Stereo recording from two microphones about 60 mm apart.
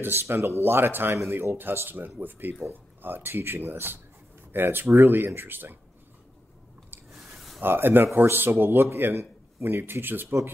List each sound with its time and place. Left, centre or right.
0.0 s speech: right
7.1 s a sound: centre
7.6 s speech: right